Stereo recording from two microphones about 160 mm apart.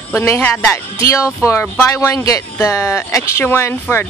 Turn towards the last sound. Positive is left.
turn(degrees=10)  # may be behind; listen again after turning